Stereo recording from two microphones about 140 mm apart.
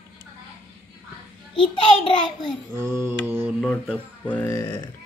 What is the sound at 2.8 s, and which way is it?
Mantra, 20° right (ahead or behind).